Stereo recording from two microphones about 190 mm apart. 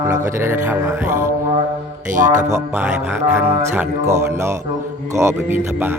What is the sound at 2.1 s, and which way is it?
Mantra, 40° right (ahead or behind).